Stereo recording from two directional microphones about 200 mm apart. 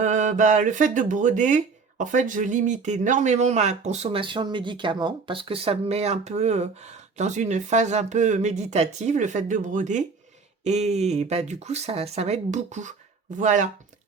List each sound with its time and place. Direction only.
0.0 s speech: 35° right (ahead or behind)